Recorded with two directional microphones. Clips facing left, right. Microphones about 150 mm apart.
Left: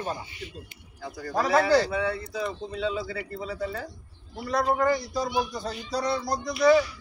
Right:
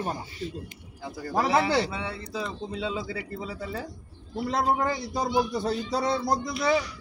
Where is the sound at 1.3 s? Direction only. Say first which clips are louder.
Left 2 dB; 25° right (ahead or behind).